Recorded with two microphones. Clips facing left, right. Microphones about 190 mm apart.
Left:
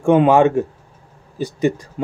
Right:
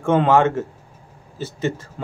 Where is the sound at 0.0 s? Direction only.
15° left (ahead or behind).